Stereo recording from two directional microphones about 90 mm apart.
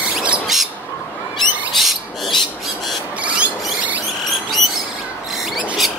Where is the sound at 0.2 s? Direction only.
5° right (ahead or behind).